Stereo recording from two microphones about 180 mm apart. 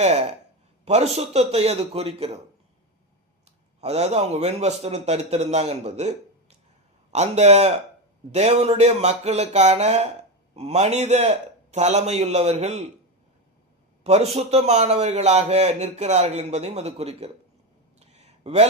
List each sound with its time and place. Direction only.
0.0 s a man's voice: 35° right (ahead or behind)
3.8 s a man's voice: 35° right (ahead or behind)
14.0 s a man's voice: 35° right (ahead or behind)
18.0 s a sound: 40° right (ahead or behind)